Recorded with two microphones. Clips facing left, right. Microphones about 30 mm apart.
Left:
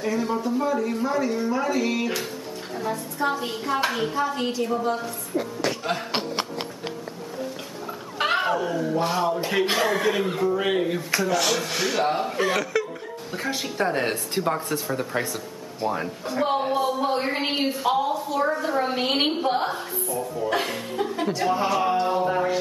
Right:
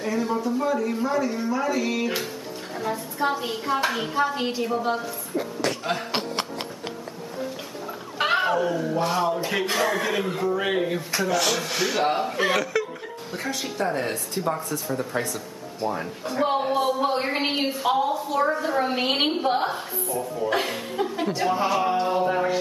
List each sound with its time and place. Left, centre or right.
0.0 s a woman's voice: centre
2.7 s a woman's voice: centre
5.0 s a sound: centre
8.2 s a woman's voice: centre
12.7 s chuckle: centre
13.6 s speech: left
15.1 s a woman's voice: centre